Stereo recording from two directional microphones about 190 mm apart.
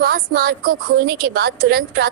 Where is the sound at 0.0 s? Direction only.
50° right (ahead or behind).